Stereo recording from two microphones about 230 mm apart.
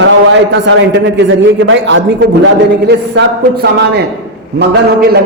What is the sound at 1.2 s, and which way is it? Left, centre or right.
A man's voice, right.